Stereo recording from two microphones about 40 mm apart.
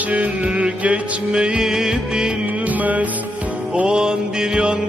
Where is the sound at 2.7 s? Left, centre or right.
Right.